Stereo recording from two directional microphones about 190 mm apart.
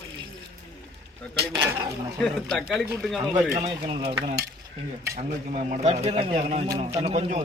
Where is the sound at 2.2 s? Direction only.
Centre (ahead or behind).